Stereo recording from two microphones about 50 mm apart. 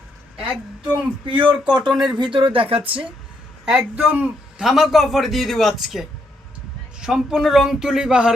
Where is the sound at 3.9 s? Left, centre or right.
Right.